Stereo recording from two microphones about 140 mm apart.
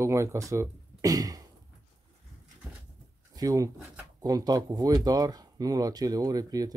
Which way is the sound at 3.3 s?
25° right (ahead or behind).